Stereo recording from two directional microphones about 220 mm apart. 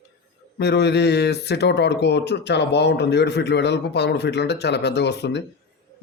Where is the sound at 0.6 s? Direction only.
50° left (ahead or behind).